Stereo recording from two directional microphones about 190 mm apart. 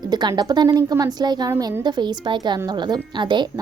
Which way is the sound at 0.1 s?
20° right (ahead or behind).